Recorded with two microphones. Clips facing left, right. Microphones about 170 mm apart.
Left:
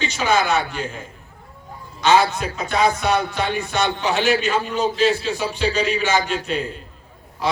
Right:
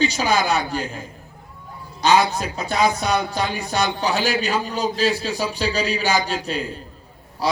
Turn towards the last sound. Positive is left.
turn(degrees=-35)  # may be behind; listen again after turning